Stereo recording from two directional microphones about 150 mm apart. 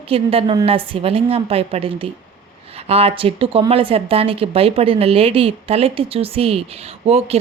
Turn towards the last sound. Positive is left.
turn(degrees=-45)  # may be behind; listen again after turning